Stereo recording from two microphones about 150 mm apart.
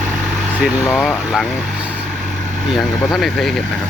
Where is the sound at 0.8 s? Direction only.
15° left (ahead or behind).